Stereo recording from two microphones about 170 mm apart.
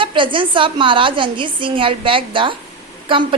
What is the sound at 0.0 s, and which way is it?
A woman's voice, 30° right (ahead or behind).